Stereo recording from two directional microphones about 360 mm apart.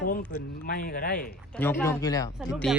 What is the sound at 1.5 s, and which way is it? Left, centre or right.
Speech, centre.